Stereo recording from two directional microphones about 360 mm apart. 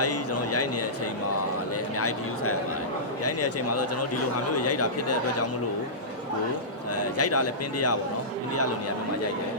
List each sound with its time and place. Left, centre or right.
0.0 s a sound: left
2.0 s a man's voice: left
7.0 s speech: left